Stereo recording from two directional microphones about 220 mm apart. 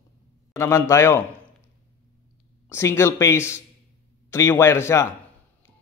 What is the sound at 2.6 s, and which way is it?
A man's voice, 10° left (ahead or behind).